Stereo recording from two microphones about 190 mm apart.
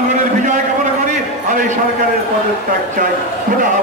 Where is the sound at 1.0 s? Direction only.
45° right (ahead or behind).